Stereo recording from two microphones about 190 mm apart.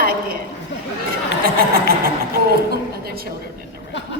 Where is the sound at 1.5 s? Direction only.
50° right (ahead or behind).